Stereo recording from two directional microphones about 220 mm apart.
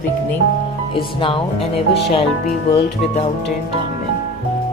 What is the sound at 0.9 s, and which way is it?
Speech, 25° left (ahead or behind).